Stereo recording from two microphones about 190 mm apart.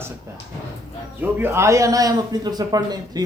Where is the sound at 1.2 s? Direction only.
10° right (ahead or behind).